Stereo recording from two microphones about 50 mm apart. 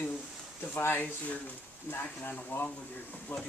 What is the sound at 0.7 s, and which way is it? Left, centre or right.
Speech, left.